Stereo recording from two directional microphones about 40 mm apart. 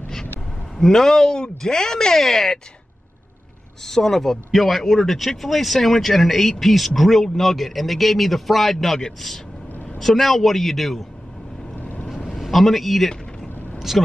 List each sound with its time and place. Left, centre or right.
0.7 s speech: centre
3.8 s speech: centre
11.7 s vehicle: left
12.4 s a man's voice: centre
13.7 s vehicle: centre